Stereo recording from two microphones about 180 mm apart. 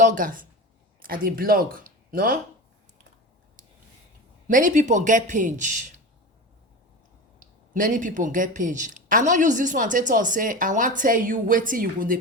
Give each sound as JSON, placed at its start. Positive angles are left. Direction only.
{"t": 0.0, "sound": "a woman's voice", "side_deg": -45}
{"t": 4.4, "sound": "a woman's voice", "side_deg": -45}
{"t": 7.7, "sound": "a woman's voice", "side_deg": -45}